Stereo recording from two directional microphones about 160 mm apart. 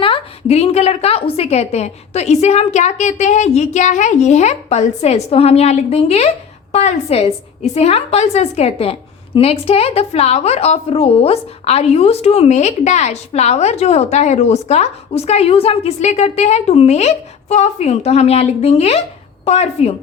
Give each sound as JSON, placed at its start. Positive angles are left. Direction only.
{"t": 0.0, "sound": "a woman's voice", "side_deg": 35}